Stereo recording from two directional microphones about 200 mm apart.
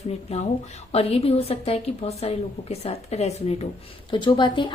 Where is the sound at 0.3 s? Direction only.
30° left (ahead or behind).